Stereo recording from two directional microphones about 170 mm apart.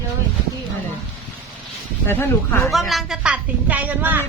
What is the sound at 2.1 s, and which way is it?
Speech, 15° left (ahead or behind).